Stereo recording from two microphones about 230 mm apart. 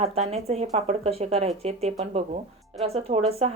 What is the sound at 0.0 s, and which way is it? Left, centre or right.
Speech, right.